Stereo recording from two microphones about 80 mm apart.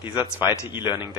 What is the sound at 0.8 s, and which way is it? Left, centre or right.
Speech, left.